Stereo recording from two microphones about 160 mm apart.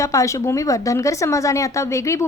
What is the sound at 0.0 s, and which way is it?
A woman's voice, 20° left (ahead or behind).